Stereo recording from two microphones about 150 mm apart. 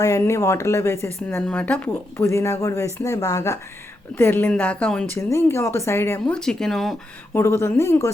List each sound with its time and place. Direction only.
0.0 s speech: 20° left (ahead or behind)
6.3 s speech: 5° left (ahead or behind)
7.3 s speech: 20° left (ahead or behind)